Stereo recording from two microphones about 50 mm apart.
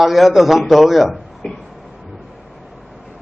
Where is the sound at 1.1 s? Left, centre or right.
Centre.